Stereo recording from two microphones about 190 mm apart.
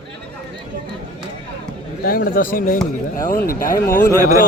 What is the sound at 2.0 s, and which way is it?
Speech, 50° left (ahead or behind).